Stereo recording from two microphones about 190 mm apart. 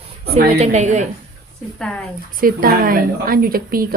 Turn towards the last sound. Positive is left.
turn(degrees=-50)  # may be behind; listen again after turning